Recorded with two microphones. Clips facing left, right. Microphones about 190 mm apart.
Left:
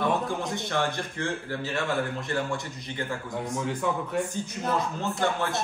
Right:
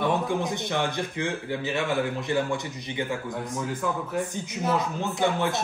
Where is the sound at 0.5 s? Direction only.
15° right (ahead or behind).